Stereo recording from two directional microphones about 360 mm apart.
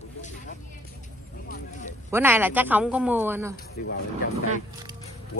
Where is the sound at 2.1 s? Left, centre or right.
Centre.